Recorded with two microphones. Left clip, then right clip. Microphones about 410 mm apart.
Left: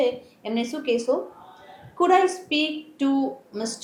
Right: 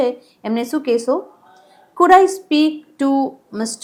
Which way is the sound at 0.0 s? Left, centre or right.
Right.